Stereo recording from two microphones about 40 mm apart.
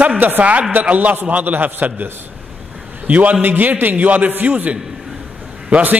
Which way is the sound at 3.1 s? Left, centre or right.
Right.